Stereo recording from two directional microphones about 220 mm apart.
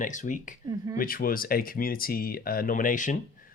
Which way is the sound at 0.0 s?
35° left (ahead or behind).